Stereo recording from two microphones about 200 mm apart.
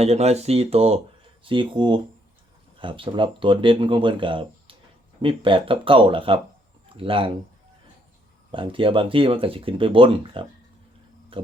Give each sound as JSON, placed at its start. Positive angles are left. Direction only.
{"t": 0.0, "sound": "speech", "side_deg": -30}
{"t": 8.5, "sound": "speech", "side_deg": -25}
{"t": 11.3, "sound": "tick-tock", "side_deg": -25}